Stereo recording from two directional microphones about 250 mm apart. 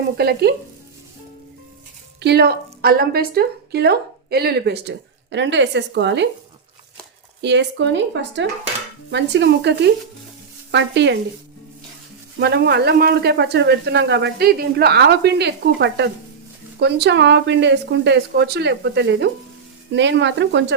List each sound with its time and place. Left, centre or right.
0.2 s speech: right
2.2 s speech: right
7.4 s speech: right
12.4 s speech: right